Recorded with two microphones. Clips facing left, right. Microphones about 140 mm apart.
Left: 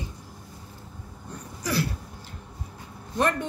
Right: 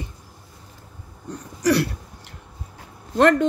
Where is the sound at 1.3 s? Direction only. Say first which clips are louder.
Right 11 dB; 75° right (ahead or behind).